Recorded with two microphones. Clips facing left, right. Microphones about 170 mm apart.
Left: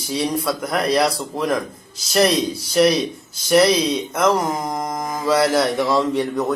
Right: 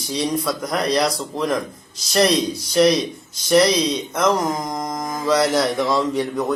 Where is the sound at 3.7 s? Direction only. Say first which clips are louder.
Left 1 dB; 25° left (ahead or behind).